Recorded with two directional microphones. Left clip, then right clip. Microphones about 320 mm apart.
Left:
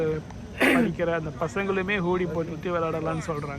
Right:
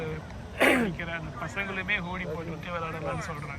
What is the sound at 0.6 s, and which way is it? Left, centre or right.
Speech, right.